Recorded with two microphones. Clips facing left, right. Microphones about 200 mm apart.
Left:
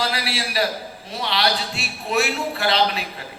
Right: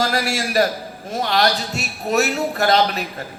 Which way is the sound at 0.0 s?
45° right (ahead or behind).